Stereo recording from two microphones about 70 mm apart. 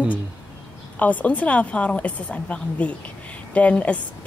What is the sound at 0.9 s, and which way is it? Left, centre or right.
A woman's voice, left.